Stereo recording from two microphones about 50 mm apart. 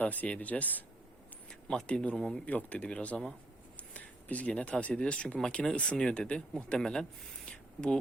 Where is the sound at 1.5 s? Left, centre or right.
Centre.